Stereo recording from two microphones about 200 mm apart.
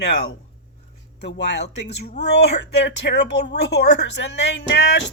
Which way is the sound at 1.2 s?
55° left (ahead or behind).